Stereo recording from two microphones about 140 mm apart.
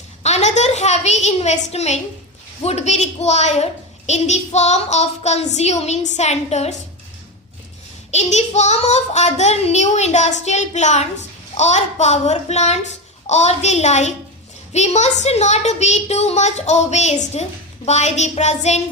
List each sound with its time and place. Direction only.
0.2 s a child's voice: 50° left (ahead or behind)
8.1 s a woman's voice: 55° left (ahead or behind)